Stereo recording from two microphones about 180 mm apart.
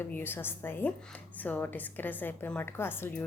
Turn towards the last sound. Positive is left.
turn(degrees=10)  # may be behind; listen again after turning